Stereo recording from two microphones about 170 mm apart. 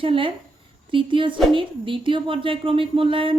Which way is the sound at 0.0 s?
30° right (ahead or behind).